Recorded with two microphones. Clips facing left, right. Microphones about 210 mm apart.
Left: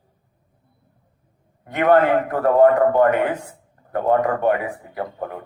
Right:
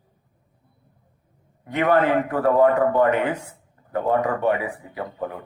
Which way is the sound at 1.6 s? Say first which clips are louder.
Left 3 dB; 50° left (ahead or behind).